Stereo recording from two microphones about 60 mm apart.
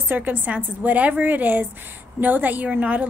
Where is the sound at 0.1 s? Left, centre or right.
Right.